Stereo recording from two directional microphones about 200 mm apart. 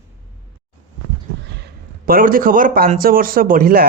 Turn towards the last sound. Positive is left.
turn(degrees=-45)  # may be behind; listen again after turning